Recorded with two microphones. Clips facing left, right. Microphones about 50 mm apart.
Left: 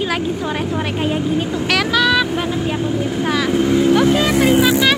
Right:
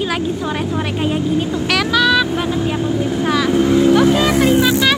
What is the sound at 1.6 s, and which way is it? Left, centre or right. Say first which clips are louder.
Vehicle: right 1 dB; left.